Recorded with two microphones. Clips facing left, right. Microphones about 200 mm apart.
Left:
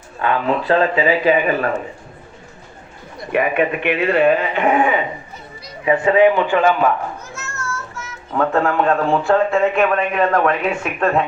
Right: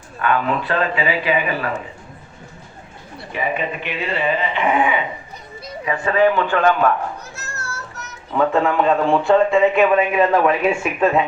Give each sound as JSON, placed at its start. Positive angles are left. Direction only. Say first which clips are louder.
{"t": 0.2, "sound": "speech", "louder": "left 1 dB", "side_deg": 30}
{"t": 3.3, "sound": "speech", "louder": "left 6 dB", "side_deg": 65}
{"t": 5.8, "sound": "a man's voice", "louder": "left 4 dB", "side_deg": 20}
{"t": 7.3, "sound": "music", "louder": "left 4 dB", "side_deg": -35}
{"t": 8.3, "sound": "speech", "louder": "even", "side_deg": 0}